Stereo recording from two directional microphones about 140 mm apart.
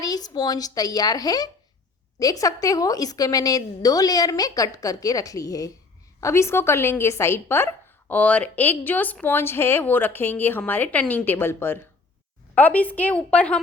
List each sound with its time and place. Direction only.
0.0 s a woman's voice: 25° left (ahead or behind); by 13.6 s 10° left (ahead or behind)